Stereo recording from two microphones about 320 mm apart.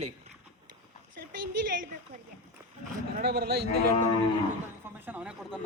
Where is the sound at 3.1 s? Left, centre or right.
Right.